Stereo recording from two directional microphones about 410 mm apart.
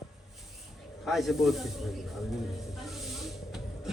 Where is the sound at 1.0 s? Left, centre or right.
Centre.